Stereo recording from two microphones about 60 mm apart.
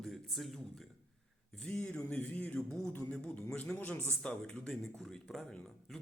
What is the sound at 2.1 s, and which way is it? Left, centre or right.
Speech, left.